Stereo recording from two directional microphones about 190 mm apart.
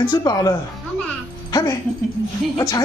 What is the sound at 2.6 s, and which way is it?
Speech, 20° left (ahead or behind).